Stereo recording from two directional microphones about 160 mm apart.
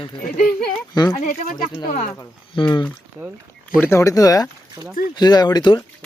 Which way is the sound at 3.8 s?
15° left (ahead or behind).